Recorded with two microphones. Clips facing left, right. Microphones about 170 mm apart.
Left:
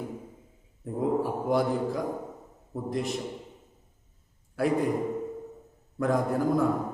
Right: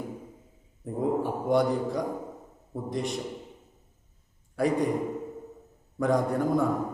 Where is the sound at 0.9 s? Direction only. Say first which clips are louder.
Even; centre (ahead or behind).